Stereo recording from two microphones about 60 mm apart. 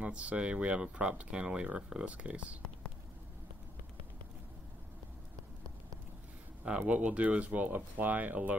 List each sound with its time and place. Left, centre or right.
0.0 s speech: right
6.9 s speech: right